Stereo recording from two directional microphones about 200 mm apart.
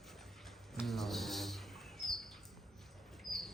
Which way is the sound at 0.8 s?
Centre (ahead or behind).